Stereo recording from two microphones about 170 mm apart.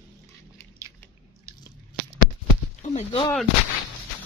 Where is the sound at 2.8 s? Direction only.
40° left (ahead or behind).